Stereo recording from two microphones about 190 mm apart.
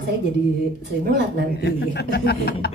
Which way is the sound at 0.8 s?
65° right (ahead or behind).